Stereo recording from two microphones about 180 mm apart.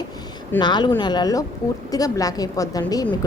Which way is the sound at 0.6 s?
25° left (ahead or behind).